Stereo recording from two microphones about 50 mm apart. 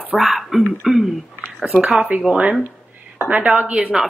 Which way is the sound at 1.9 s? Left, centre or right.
Right.